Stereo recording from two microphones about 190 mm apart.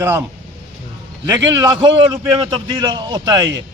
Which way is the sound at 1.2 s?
15° right (ahead or behind).